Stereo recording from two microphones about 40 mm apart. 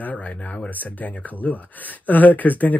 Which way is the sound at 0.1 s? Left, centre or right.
Left.